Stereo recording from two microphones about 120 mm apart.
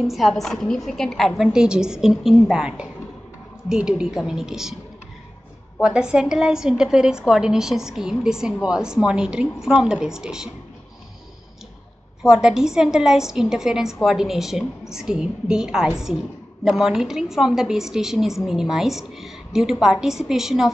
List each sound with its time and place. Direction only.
0.0 s a woman's voice: centre (ahead or behind)
5.8 s a woman's voice: 5° right (ahead or behind)
12.2 s a woman's voice: 5° right (ahead or behind)